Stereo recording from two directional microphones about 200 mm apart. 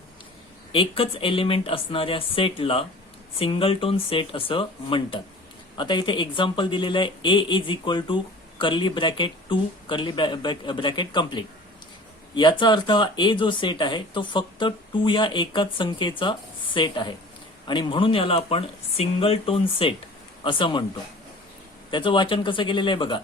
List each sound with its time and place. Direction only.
0.7 s speech: 25° left (ahead or behind)
21.8 s speech: 25° left (ahead or behind)